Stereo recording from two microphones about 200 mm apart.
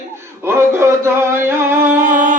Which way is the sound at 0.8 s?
10° right (ahead or behind).